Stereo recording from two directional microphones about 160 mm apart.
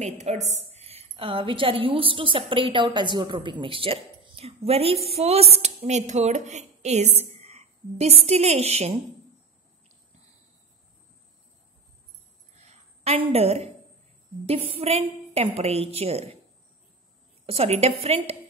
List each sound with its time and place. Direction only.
0.0 s a woman's voice: 45° right (ahead or behind)
12.5 s a sound: 40° right (ahead or behind)
13.3 s a woman's voice: 40° right (ahead or behind)
17.5 s a woman's voice: 40° right (ahead or behind)